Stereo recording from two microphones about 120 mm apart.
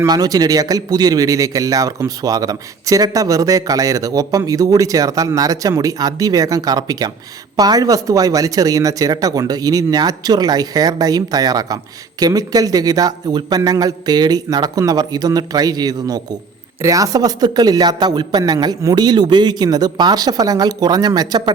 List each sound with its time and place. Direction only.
0.0 s a man's voice: 30° right (ahead or behind)